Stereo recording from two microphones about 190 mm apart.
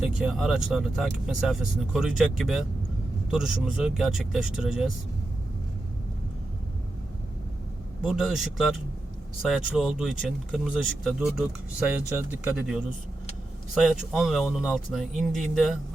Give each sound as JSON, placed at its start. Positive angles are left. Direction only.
{"t": 0.0, "sound": "speech", "side_deg": -5}
{"t": 8.0, "sound": "speech", "side_deg": -5}